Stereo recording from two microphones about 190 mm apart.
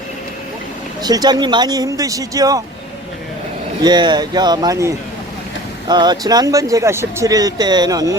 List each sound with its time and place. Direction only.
1.0 s speech: 20° right (ahead or behind)
3.8 s speech: 25° right (ahead or behind)